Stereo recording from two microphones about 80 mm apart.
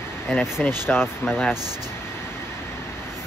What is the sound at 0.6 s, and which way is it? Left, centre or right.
Speech, left.